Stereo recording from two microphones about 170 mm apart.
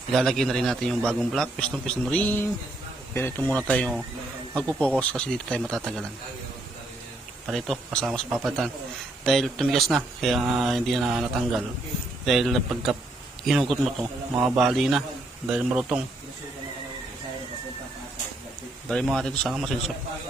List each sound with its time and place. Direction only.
0.1 s a man's voice: centre (ahead or behind)
7.4 s a man's voice: centre (ahead or behind)
18.9 s a man's voice: centre (ahead or behind)